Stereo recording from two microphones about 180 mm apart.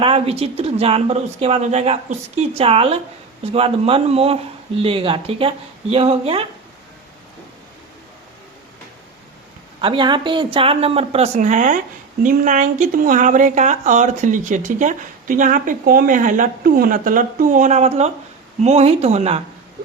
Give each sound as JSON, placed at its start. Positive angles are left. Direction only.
{"t": 0.0, "sound": "a woman's voice", "side_deg": -35}
{"t": 9.8, "sound": "a woman's voice", "side_deg": -25}